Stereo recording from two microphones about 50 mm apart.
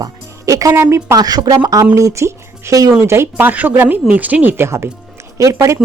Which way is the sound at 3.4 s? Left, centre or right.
Right.